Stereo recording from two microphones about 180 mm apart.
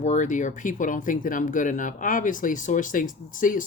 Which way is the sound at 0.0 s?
40° left (ahead or behind).